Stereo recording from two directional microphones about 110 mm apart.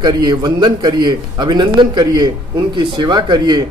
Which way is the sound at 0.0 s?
40° right (ahead or behind).